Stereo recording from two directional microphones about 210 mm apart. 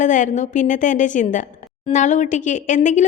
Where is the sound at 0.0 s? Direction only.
35° left (ahead or behind).